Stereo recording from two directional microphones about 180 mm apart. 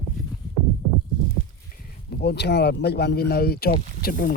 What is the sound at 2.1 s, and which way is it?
Speech, 60° left (ahead or behind).